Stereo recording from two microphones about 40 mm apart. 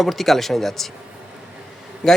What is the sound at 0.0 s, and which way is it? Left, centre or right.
Speech, centre.